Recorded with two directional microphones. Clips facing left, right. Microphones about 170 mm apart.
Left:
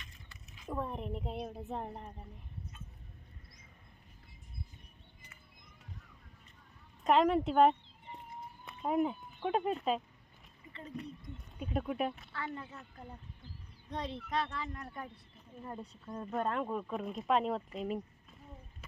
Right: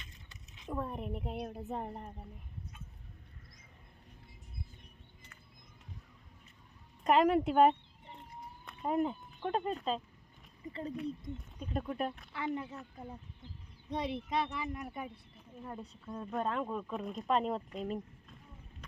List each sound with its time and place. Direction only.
0.0 s a sound: 20° right (ahead or behind)
0.7 s speech: centre (ahead or behind)
7.0 s speech: centre (ahead or behind)
10.7 s speech: 35° right (ahead or behind)
10.9 s speech: 5° left (ahead or behind)
12.3 s speech: 15° right (ahead or behind)
15.6 s speech: 5° left (ahead or behind)